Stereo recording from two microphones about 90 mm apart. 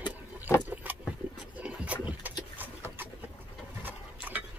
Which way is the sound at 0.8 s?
20° right (ahead or behind).